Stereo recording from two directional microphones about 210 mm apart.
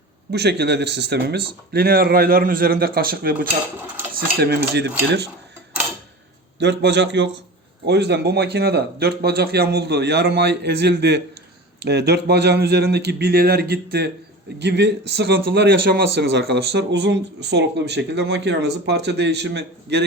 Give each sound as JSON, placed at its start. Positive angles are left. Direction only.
{"t": 0.3, "sound": "a man's voice", "side_deg": -50}
{"t": 6.6, "sound": "a man's voice", "side_deg": -55}